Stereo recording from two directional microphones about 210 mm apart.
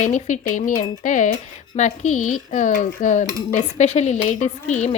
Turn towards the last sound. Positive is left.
turn(degrees=35)  # may be behind; listen again after turning